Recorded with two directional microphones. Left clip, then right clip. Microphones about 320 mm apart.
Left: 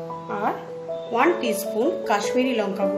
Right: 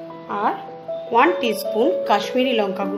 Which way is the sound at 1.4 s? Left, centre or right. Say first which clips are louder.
Right 4 dB; centre.